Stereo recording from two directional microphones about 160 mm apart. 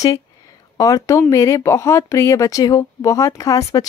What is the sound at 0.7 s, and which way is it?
A woman's voice, 20° left (ahead or behind).